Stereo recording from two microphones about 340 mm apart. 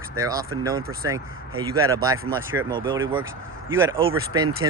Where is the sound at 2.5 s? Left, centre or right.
Centre.